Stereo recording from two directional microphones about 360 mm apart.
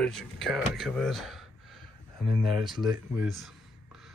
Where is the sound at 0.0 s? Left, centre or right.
Centre.